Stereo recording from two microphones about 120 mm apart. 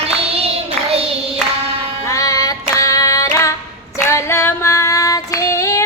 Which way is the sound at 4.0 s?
20° left (ahead or behind).